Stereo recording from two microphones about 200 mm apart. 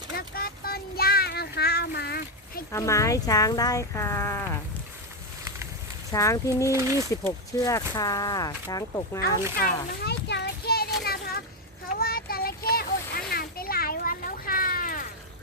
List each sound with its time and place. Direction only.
0.2 s child singing: 50° left (ahead or behind)
2.7 s speech: 15° left (ahead or behind)
6.1 s speech: 15° left (ahead or behind)
6.7 s speech: 15° right (ahead or behind)
7.1 s speech: 15° left (ahead or behind)
10.0 s a sound: 55° left (ahead or behind)
11.0 s children playing: 50° left (ahead or behind)
11.9 s a sound: 50° left (ahead or behind)